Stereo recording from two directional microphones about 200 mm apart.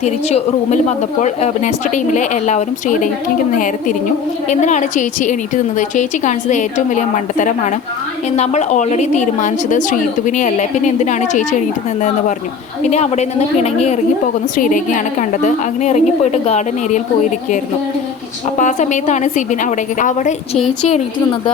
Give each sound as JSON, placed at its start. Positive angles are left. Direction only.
{"t": 0.0, "sound": "a woman's voice", "side_deg": 35}
{"t": 12.8, "sound": "a woman's voice", "side_deg": 35}
{"t": 18.6, "sound": "a woman's voice", "side_deg": 35}